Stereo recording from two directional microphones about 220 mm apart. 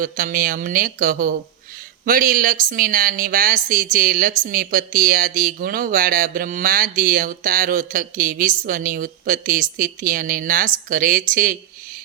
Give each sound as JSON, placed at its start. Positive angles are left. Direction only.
{"t": 0.0, "sound": "speech", "side_deg": -40}